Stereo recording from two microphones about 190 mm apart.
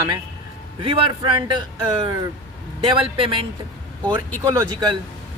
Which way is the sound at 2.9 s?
25° right (ahead or behind).